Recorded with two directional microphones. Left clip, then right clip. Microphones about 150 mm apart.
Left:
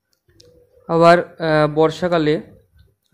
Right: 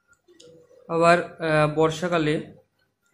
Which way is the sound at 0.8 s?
40° left (ahead or behind).